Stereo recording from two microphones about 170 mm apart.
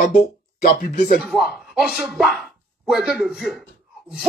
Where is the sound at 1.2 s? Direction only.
Centre (ahead or behind).